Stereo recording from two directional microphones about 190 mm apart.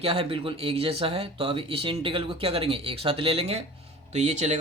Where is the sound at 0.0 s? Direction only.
30° right (ahead or behind).